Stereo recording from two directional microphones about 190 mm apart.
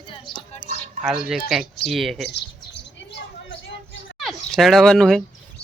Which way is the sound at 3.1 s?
75° left (ahead or behind).